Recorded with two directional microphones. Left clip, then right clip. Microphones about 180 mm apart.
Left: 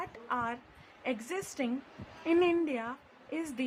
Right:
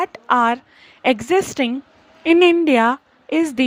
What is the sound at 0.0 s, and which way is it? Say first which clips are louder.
A woman's voice: right 18 dB; 55° right (ahead or behind).